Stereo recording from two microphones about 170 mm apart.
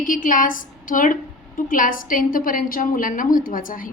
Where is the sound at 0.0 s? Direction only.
50° left (ahead or behind).